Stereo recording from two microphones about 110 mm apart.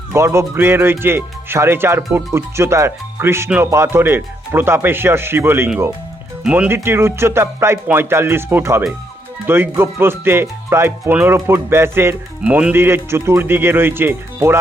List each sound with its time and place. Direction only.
0.1 s speech: 25° right (ahead or behind)
12.4 s speech: 10° right (ahead or behind)